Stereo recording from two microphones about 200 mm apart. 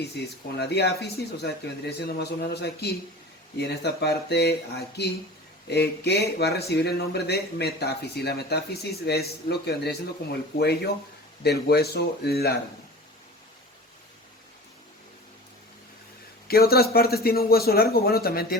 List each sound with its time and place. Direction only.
0.2 s speech: 55° left (ahead or behind)
11.4 s speech: 55° left (ahead or behind)
16.5 s speech: 50° left (ahead or behind)